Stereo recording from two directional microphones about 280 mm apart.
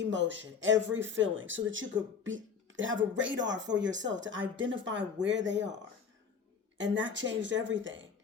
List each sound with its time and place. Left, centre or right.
0.0 s speech: right
6.7 s speech: right